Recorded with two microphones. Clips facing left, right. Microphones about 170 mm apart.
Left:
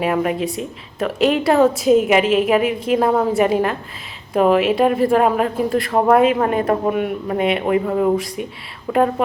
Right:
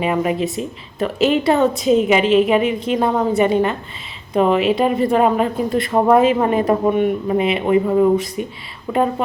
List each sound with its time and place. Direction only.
0.0 s a woman's voice: centre (ahead or behind)